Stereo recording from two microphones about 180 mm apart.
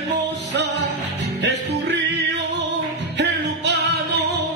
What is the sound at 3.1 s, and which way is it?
Music, 70° right (ahead or behind).